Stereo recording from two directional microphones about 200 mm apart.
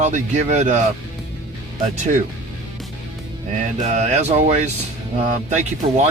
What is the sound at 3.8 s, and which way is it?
Speech, 35° right (ahead or behind).